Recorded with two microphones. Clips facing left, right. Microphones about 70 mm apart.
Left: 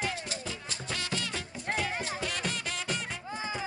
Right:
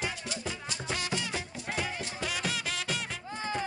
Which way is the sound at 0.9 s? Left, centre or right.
Centre.